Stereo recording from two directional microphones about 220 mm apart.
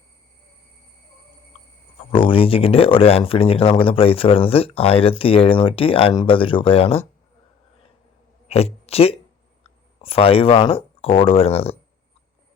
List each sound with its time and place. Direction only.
2.1 s speech: 25° left (ahead or behind)
8.4 s speech: 30° left (ahead or behind)